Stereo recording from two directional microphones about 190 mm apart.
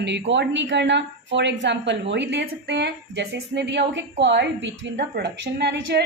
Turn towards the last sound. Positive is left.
turn(degrees=-65)  # may be behind; listen again after turning